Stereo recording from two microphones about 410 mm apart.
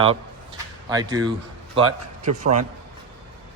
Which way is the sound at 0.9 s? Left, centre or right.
Centre.